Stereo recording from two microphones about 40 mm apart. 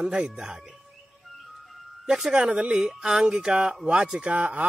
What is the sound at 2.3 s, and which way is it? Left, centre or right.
A man's voice, right.